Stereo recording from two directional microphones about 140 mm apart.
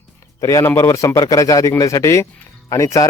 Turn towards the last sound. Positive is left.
turn(degrees=25)  # may be behind; listen again after turning